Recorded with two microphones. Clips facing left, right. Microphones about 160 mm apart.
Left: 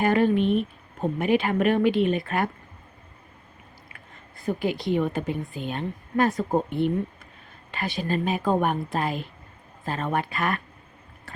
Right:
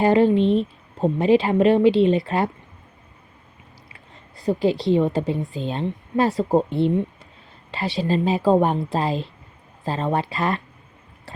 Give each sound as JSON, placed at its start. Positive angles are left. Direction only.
{"t": 0.0, "sound": "speech", "side_deg": -25}
{"t": 4.4, "sound": "speech", "side_deg": -30}